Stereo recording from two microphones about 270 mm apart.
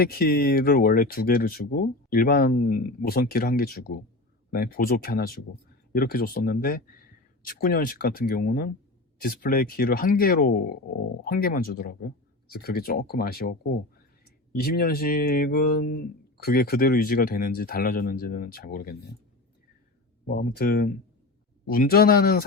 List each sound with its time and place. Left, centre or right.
0.0 s speech: left
20.2 s speech: left